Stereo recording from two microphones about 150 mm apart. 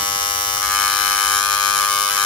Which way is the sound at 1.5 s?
30° left (ahead or behind).